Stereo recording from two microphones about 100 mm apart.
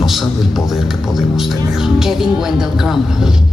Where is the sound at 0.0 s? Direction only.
Centre (ahead or behind).